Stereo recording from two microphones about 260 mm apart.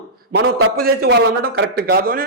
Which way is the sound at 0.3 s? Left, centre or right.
Right.